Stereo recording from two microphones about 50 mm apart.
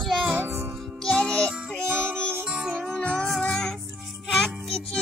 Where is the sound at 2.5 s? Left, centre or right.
Right.